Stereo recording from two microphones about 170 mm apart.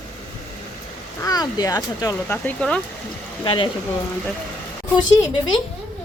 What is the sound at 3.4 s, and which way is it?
Speech, 30° left (ahead or behind).